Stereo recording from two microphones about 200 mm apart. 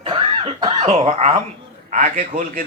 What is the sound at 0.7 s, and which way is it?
Speech, 35° right (ahead or behind).